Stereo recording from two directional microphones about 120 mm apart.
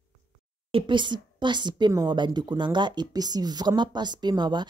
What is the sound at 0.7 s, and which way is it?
A woman's voice, 40° right (ahead or behind).